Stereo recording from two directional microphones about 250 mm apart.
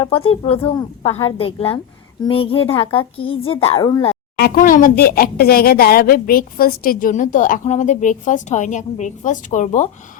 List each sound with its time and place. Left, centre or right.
0.0 s a woman's voice: left
4.4 s speech: left